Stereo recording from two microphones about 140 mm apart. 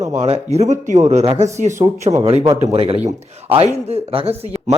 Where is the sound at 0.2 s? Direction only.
45° right (ahead or behind).